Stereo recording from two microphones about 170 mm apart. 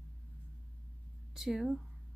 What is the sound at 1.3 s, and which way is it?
Speech, centre (ahead or behind).